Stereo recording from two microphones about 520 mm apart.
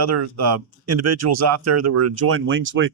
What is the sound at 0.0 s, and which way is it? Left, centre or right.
Speech, right.